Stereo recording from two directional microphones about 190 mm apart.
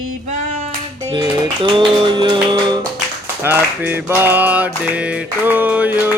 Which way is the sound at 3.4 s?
10° right (ahead or behind).